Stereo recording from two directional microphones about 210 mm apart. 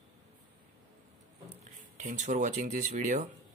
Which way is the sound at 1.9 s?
35° right (ahead or behind).